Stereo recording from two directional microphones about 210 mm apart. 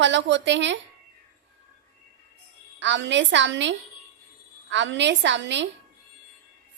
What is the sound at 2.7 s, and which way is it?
A woman's voice, 60° right (ahead or behind).